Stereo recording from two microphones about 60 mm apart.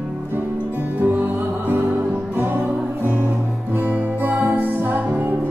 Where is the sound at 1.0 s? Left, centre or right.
Right.